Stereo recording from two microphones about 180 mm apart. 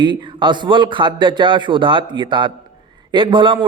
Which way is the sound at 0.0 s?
25° right (ahead or behind).